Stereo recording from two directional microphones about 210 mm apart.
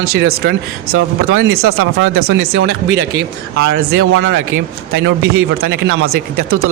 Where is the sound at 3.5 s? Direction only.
50° right (ahead or behind).